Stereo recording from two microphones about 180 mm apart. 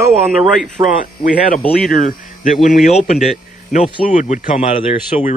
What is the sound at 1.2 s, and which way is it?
Speech, 50° left (ahead or behind).